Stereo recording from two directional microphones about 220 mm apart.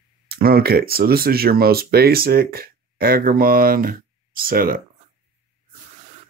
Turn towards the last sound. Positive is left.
turn(degrees=-40)  # may be behind; listen again after turning